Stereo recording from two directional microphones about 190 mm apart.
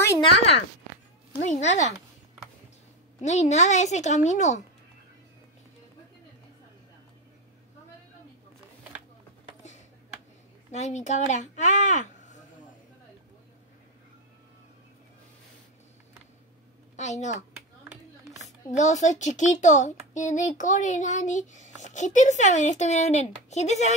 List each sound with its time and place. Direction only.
1.5 s a child's voice: 35° left (ahead or behind)
3.2 s a child's voice: 35° left (ahead or behind)
10.7 s speech: 35° left (ahead or behind)
16.9 s a woman's voice: 35° left (ahead or behind)
18.7 s a child's voice: 40° left (ahead or behind)